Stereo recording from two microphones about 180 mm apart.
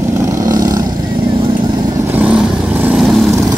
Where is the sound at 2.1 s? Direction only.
5° right (ahead or behind).